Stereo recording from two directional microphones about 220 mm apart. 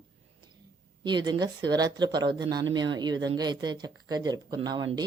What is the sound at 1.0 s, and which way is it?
Speech, 20° right (ahead or behind).